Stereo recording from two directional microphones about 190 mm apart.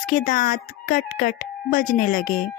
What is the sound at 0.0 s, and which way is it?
Speech, 45° left (ahead or behind).